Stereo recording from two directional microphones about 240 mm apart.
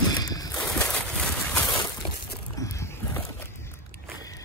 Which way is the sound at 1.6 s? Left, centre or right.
Centre.